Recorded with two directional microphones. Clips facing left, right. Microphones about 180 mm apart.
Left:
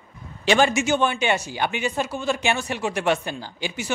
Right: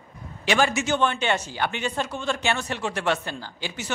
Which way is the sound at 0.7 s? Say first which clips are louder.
Left 2 dB; 10° left (ahead or behind).